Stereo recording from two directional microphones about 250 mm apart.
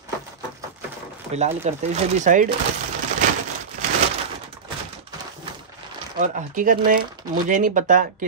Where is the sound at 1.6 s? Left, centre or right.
Right.